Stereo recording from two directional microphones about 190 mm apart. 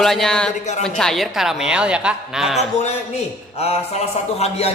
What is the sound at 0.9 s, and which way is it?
Speech, 5° left (ahead or behind).